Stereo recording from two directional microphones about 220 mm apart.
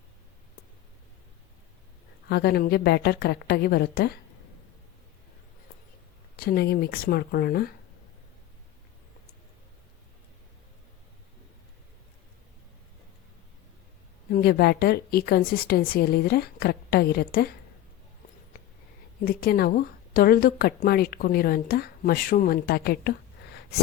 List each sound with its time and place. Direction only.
2.3 s a woman's voice: 45° left (ahead or behind)
6.3 s a woman's voice: 45° left (ahead or behind)
14.3 s a woman's voice: 45° left (ahead or behind)
19.2 s a woman's voice: 45° left (ahead or behind)